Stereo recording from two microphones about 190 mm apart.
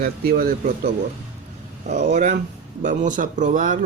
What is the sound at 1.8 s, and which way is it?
Speech, 40° right (ahead or behind).